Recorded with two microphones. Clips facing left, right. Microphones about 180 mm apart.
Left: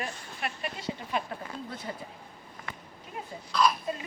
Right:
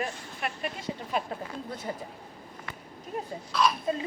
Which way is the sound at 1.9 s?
30° right (ahead or behind).